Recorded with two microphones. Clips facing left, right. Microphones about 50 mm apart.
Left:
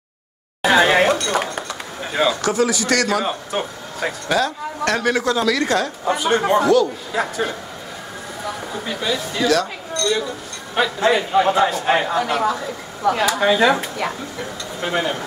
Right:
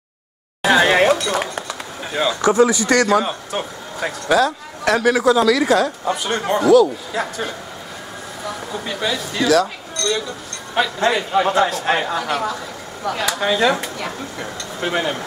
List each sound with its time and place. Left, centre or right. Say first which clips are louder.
0.6 s a sound: even; centre
2.4 s speech: right 4 dB; right
3.1 s speech: right 3 dB; centre